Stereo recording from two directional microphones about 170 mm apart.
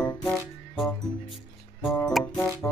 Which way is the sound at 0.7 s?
Centre (ahead or behind).